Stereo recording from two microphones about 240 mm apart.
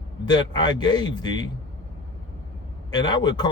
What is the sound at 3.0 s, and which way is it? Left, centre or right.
Speech, centre.